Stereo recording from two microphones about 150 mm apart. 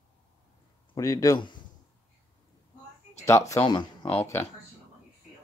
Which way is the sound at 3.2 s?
20° left (ahead or behind).